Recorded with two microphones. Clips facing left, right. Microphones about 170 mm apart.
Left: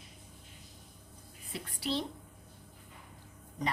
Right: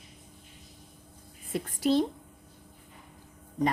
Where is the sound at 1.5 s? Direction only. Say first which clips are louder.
Right 10 dB; 45° right (ahead or behind).